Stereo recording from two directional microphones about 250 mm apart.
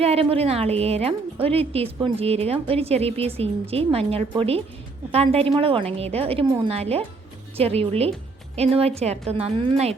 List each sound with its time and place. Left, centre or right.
0.0 s a woman's voice: right